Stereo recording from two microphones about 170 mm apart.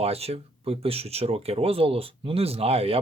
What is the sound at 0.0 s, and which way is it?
Speech, 35° right (ahead or behind).